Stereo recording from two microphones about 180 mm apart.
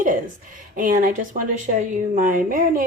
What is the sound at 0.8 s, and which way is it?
Speech, 50° right (ahead or behind).